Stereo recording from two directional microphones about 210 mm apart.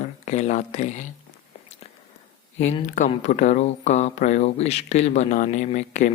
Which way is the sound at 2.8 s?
35° left (ahead or behind).